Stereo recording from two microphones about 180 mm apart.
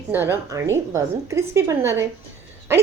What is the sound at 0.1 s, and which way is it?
A woman's voice, 10° right (ahead or behind).